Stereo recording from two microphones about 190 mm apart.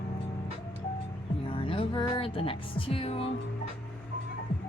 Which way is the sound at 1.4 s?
30° left (ahead or behind).